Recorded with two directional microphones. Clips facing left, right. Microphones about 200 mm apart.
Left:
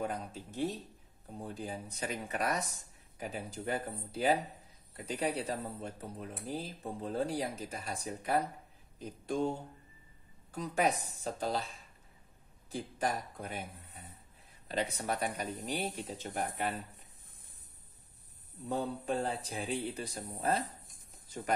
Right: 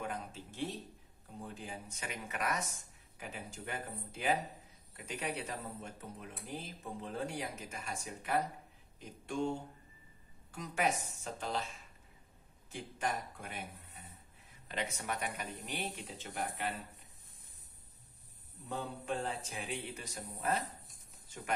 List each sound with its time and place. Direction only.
0.0 s speech: 35° left (ahead or behind)
10.5 s speech: 35° left (ahead or behind)
12.7 s speech: 35° left (ahead or behind)
14.7 s speech: 35° left (ahead or behind)
18.7 s speech: 40° left (ahead or behind)